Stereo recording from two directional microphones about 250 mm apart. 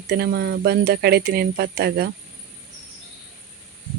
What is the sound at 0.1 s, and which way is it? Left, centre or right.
Speech, right.